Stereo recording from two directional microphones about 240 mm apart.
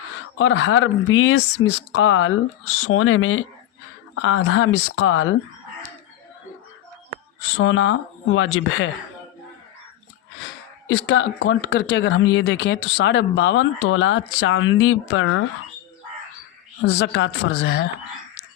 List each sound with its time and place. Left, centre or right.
0.3 s speech: left
7.5 s speech: left
10.8 s speech: left
16.8 s speech: left